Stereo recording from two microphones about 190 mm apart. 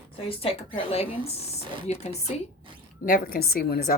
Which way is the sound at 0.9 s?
30° left (ahead or behind).